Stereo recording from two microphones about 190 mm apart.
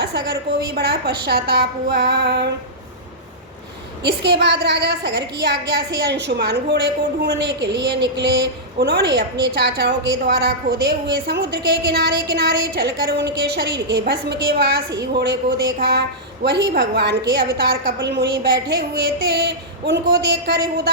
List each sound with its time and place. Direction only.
0.0 s a woman's voice: 60° right (ahead or behind)
4.0 s a woman's voice: 60° right (ahead or behind)